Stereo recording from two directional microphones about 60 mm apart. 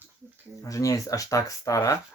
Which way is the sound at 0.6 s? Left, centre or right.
Left.